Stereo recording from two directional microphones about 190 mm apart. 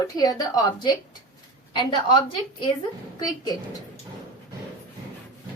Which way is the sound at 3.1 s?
20° left (ahead or behind).